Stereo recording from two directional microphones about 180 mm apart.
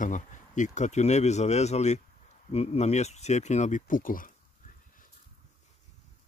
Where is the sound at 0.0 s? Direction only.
45° left (ahead or behind).